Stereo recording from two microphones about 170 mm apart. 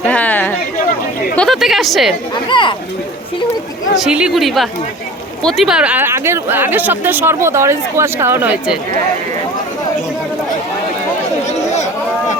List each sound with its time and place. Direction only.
0.0 s chatter: 10° left (ahead or behind)
1.4 s a sound: centre (ahead or behind)
2.3 s speech: 30° left (ahead or behind)
3.9 s speech: 5° right (ahead or behind)
11.4 s chatter: 40° left (ahead or behind)